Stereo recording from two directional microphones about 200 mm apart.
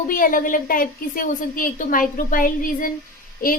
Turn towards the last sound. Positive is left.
turn(degrees=45)  # may be behind; listen again after turning